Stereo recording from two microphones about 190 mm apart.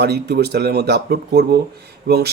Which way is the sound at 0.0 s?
60° right (ahead or behind).